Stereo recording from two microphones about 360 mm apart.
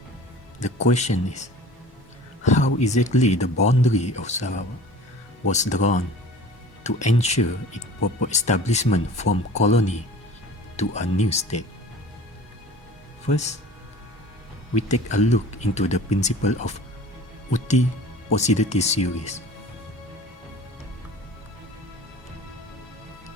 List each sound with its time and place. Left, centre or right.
0.6 s speech: centre
2.4 s a sound: centre
2.7 s speech: centre
13.2 s speech: centre
15.1 s speech: centre